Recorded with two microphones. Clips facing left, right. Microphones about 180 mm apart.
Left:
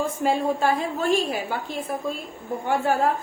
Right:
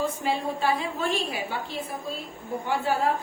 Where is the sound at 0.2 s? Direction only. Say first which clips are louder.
Left 5 dB; 45° left (ahead or behind).